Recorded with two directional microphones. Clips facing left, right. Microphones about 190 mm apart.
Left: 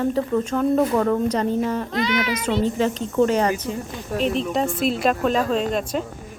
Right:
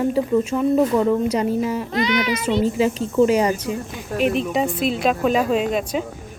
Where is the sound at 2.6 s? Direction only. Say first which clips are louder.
Right 2 dB; 10° right (ahead or behind).